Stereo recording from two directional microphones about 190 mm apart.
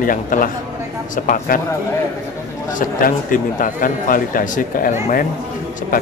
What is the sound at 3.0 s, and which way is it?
Speech, 45° left (ahead or behind).